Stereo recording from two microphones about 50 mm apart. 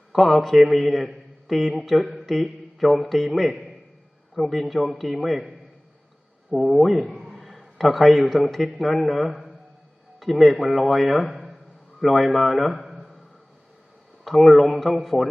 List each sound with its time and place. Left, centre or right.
0.1 s a man's voice: centre
6.6 s a man's voice: centre
14.3 s a man's voice: centre